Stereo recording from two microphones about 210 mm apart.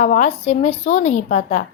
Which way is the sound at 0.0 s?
35° left (ahead or behind).